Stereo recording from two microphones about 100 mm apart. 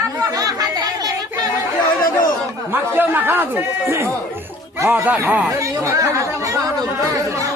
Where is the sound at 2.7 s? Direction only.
20° right (ahead or behind).